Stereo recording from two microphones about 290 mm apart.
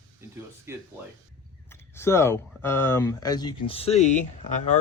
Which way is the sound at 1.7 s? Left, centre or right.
Centre.